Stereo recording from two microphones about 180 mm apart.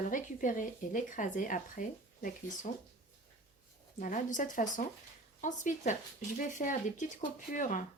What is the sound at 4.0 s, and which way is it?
Speech, 45° left (ahead or behind).